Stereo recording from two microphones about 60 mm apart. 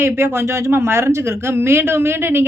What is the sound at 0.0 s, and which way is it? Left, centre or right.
Speech, right.